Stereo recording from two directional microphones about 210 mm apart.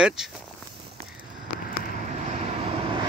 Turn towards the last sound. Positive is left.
turn(degrees=-25)  # may be behind; listen again after turning